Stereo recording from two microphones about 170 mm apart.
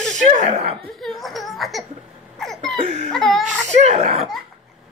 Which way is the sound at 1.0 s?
Centre (ahead or behind).